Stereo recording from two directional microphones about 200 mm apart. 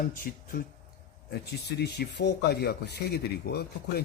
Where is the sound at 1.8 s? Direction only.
55° left (ahead or behind).